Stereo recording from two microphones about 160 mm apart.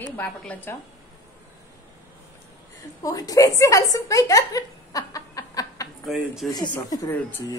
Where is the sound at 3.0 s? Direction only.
20° left (ahead or behind).